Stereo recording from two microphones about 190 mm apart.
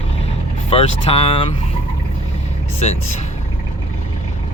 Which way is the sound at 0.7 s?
30° left (ahead or behind).